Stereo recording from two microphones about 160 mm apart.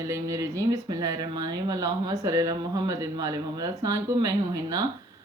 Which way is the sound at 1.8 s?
20° right (ahead or behind).